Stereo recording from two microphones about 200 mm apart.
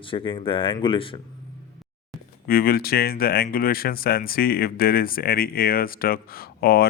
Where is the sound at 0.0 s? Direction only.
25° left (ahead or behind).